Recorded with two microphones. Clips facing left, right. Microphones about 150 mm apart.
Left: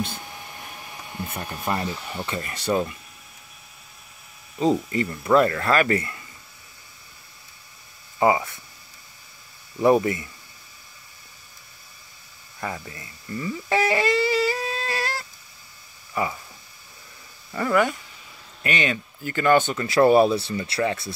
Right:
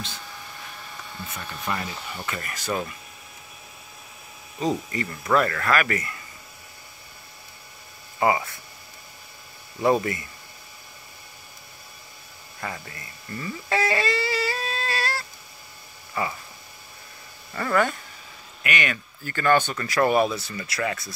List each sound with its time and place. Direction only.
0.2 s a sound: 20° left (ahead or behind)
1.3 s speech: 45° left (ahead or behind); by 2.9 s 25° left (ahead or behind)
4.6 s speech: 25° left (ahead or behind)
8.2 s speech: 20° left (ahead or behind)
9.8 s speech: 20° left (ahead or behind)
12.5 s a sound: 20° left (ahead or behind)
16.2 s speech: 15° left (ahead or behind)
17.6 s speech: 15° left (ahead or behind)
18.6 s speech: 30° left (ahead or behind)